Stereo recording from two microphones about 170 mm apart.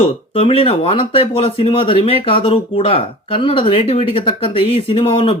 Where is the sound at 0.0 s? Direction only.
35° left (ahead or behind).